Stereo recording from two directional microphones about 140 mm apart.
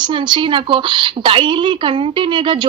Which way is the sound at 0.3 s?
35° right (ahead or behind).